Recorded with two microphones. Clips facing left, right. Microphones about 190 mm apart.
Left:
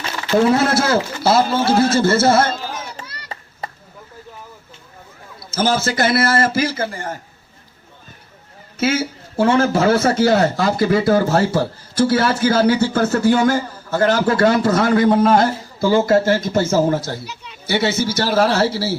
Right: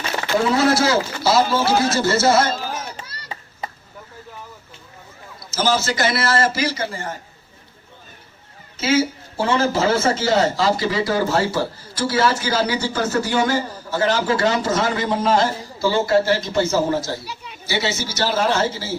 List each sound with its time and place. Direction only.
0.5 s a man's voice: 55° left (ahead or behind)
5.5 s a man's voice: 55° left (ahead or behind)
8.8 s a man's voice: 55° left (ahead or behind)
18.6 s speech: 35° left (ahead or behind)